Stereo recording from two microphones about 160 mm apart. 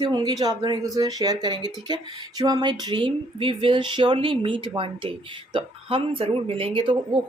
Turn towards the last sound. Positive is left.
turn(degrees=-30)  # may be behind; listen again after turning